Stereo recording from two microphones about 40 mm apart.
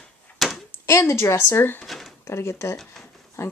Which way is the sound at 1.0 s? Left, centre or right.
Left.